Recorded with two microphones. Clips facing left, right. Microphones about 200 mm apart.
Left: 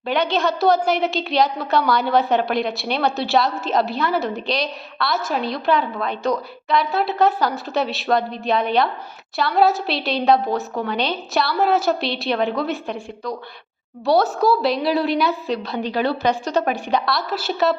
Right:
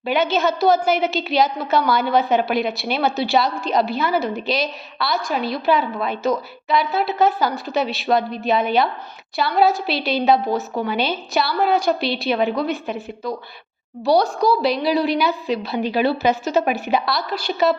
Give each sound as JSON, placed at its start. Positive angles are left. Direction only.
{"t": 0.0, "sound": "a woman's voice", "side_deg": -5}